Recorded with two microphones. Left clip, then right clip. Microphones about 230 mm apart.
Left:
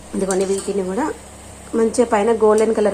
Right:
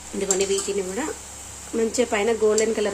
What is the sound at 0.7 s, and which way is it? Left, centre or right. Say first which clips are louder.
Speech: left 4 dB; centre.